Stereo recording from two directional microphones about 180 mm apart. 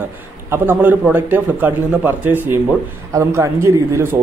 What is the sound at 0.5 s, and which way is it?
Speech, 10° right (ahead or behind).